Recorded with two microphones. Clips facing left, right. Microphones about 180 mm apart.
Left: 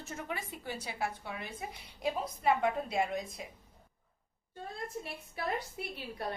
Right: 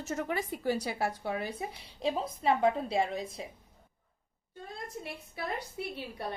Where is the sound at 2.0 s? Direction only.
25° right (ahead or behind).